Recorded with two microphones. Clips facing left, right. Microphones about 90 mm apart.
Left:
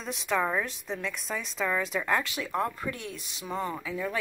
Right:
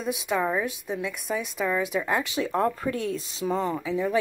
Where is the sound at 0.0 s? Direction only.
10° right (ahead or behind).